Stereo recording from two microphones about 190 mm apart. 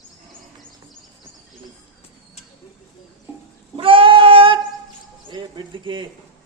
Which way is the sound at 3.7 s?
30° right (ahead or behind).